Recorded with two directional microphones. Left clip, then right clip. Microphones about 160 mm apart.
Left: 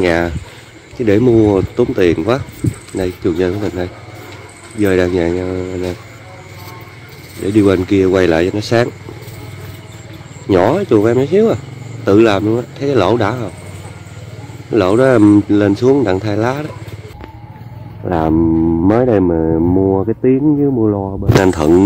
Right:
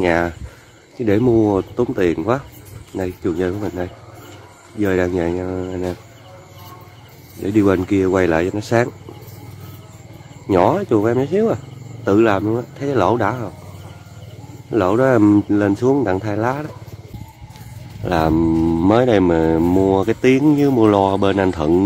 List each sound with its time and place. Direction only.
0.0 s speech: 10° right (ahead or behind)
7.5 s speech: 15° right (ahead or behind)
10.5 s speech: 5° right (ahead or behind)
14.7 s speech: 5° right (ahead or behind)
18.0 s speech: 30° right (ahead or behind); by 21.1 s 45° right (ahead or behind)
21.4 s speech: 5° left (ahead or behind)